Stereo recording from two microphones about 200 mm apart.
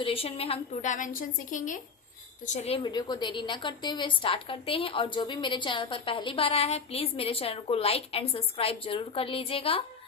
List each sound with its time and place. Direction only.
0.0 s a woman's voice: 30° left (ahead or behind)
2.5 s a woman's voice: 30° left (ahead or behind)